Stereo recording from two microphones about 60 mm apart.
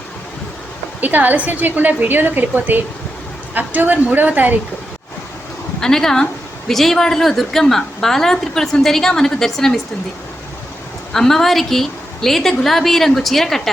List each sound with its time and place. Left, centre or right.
1.0 s a woman's voice: right
5.8 s a woman's voice: centre
11.1 s a woman's voice: centre